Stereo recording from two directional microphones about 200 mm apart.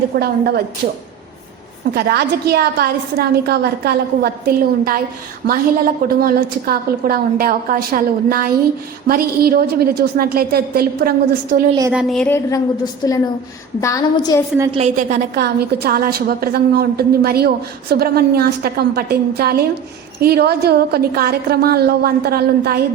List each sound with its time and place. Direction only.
0.2 s a woman's voice: 50° right (ahead or behind)
2.0 s a woman's voice: 50° right (ahead or behind)
11.9 s speech: centre (ahead or behind)
12.5 s a woman's voice: 15° left (ahead or behind)
14.8 s a woman's voice: 35° right (ahead or behind)
15.4 s a woman's voice: 50° right (ahead or behind)